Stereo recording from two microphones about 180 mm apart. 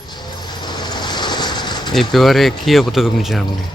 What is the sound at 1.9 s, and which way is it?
Speech, centre (ahead or behind).